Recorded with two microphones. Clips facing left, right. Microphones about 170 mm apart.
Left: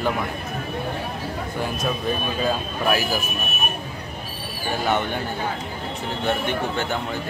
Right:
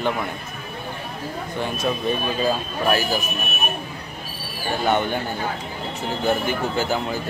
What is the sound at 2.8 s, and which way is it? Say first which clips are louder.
Speech: right 1 dB; centre (ahead or behind).